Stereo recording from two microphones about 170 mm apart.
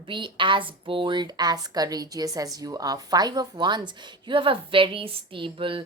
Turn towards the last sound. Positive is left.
turn(degrees=-30)  # may be behind; listen again after turning